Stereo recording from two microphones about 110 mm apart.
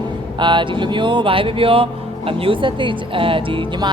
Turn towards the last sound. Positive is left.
turn(degrees=-45)  # may be behind; listen again after turning